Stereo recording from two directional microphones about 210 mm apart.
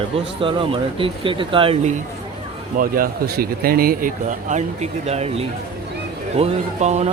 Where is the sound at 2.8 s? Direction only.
45° right (ahead or behind).